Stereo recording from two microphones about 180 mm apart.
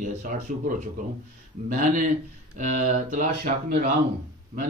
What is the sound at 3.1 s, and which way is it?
Speech, 45° right (ahead or behind).